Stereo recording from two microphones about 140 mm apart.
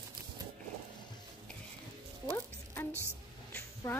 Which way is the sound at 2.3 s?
15° left (ahead or behind).